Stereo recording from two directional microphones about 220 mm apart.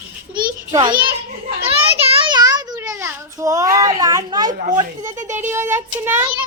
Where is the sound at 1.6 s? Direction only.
25° right (ahead or behind).